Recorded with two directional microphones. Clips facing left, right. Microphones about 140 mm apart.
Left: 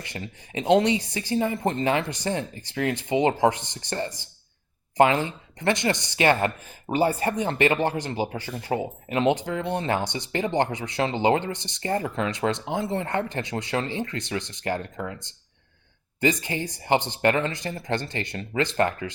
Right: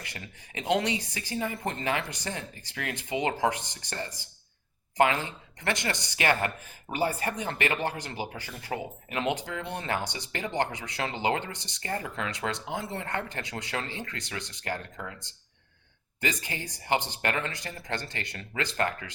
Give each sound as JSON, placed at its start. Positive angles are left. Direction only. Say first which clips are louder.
{"t": 0.0, "sound": "speech", "louder": "left 7 dB", "side_deg": 25}
{"t": 16.2, "sound": "speech", "louder": "left 8 dB", "side_deg": 25}